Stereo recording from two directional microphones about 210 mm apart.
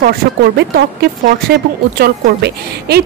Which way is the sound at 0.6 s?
50° right (ahead or behind).